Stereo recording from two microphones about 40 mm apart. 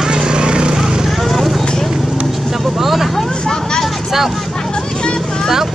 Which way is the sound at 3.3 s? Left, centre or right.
Left.